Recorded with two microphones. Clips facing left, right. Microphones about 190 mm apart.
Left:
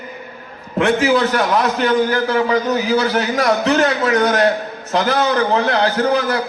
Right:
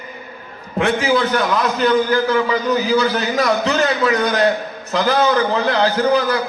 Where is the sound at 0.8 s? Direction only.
60° left (ahead or behind).